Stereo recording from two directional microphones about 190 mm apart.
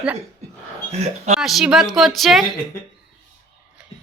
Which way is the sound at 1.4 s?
Centre (ahead or behind).